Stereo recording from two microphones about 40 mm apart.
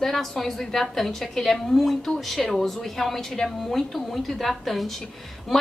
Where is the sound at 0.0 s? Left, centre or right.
Centre.